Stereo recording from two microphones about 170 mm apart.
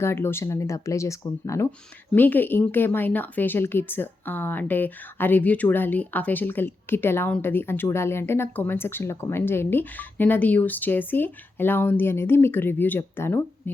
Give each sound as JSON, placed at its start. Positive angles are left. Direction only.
{"t": 0.0, "sound": "speech", "side_deg": 15}